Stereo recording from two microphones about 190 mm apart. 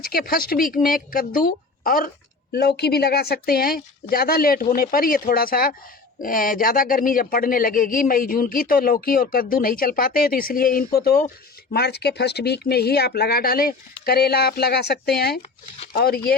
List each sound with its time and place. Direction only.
0.0 s speech: 50° left (ahead or behind)